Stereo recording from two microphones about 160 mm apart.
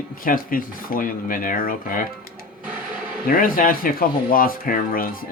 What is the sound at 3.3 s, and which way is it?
Speech, 60° left (ahead or behind).